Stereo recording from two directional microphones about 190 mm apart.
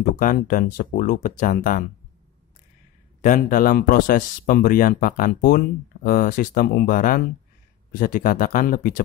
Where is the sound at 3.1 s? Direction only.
40° left (ahead or behind).